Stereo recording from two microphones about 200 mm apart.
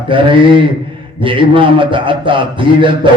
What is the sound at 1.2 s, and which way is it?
A man's voice, 25° right (ahead or behind).